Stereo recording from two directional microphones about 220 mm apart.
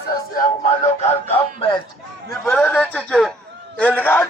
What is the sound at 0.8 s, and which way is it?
Speech, 25° left (ahead or behind).